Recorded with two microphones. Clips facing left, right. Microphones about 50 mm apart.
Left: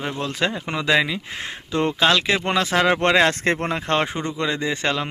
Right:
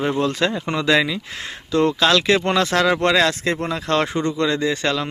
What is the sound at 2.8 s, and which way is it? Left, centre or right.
Speech, left.